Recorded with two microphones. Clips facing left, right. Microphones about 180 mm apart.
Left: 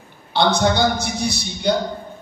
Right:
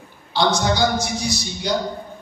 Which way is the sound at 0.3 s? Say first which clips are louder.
Left 2 dB; 60° left (ahead or behind).